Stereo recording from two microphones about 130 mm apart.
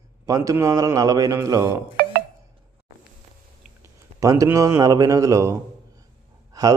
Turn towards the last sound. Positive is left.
turn(degrees=-30)  # may be behind; listen again after turning